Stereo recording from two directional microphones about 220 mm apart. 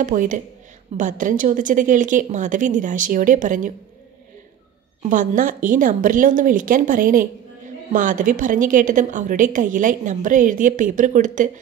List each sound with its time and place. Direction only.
0.0 s a woman's voice: 35° right (ahead or behind)
5.0 s a woman's voice: 35° right (ahead or behind)